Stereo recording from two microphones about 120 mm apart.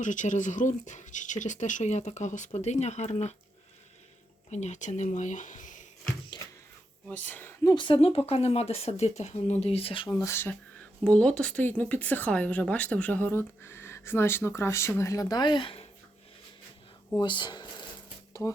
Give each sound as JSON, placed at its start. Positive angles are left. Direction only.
{"t": 0.0, "sound": "speech", "side_deg": 90}
{"t": 4.5, "sound": "speech", "side_deg": 75}
{"t": 7.1, "sound": "speech", "side_deg": 10}
{"t": 7.6, "sound": "speech", "side_deg": 30}
{"t": 7.9, "sound": "speech", "side_deg": 55}
{"t": 10.2, "sound": "speech", "side_deg": 20}
{"t": 11.0, "sound": "speech", "side_deg": 10}
{"t": 17.2, "sound": "speech", "side_deg": 40}